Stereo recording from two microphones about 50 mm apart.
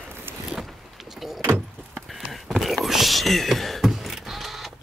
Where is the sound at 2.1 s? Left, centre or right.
Centre.